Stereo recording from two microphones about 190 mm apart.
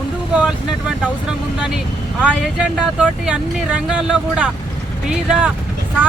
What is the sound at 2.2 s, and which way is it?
Speech, 5° right (ahead or behind).